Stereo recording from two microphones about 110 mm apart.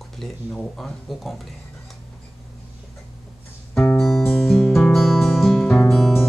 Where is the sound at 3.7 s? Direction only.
15° left (ahead or behind).